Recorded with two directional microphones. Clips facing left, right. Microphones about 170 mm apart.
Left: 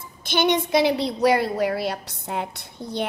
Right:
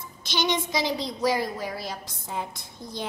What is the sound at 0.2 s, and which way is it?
A woman's voice, 55° left (ahead or behind).